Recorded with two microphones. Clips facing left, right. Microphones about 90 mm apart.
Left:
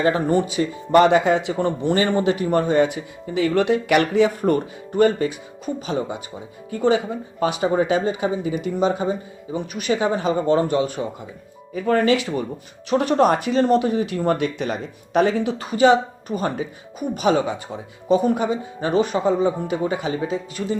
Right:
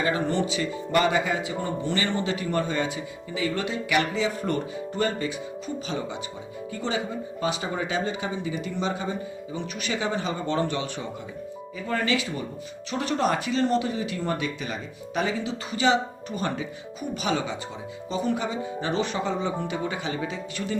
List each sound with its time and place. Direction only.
0.0 s speech: 45° left (ahead or behind)
1.0 s speech: 65° left (ahead or behind)
1.8 s speech: 50° left (ahead or behind)
6.9 s speech: 55° left (ahead or behind)
7.7 s speech: 35° left (ahead or behind)